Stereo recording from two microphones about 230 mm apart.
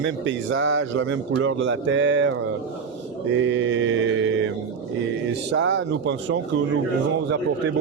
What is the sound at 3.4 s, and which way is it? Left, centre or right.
Speech, right.